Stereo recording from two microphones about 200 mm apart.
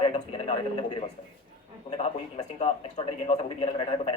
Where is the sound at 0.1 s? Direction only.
30° left (ahead or behind).